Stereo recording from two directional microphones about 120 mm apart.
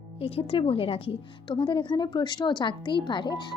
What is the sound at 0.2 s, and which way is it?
Speech, 55° left (ahead or behind).